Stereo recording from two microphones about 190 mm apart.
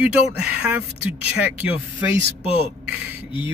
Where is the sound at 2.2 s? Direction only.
30° left (ahead or behind).